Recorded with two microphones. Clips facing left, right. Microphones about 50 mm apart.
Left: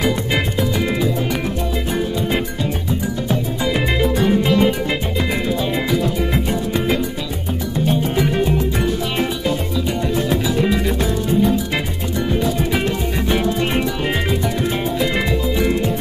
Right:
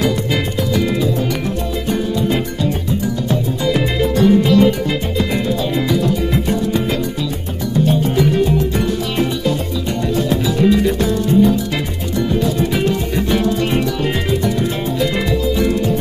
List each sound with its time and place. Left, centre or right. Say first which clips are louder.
0.0 s music: right 1 dB; centre
7.8 s music: right 3 dB; centre